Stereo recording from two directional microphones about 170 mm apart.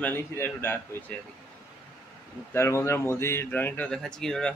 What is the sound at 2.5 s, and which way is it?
A man's voice, 15° left (ahead or behind).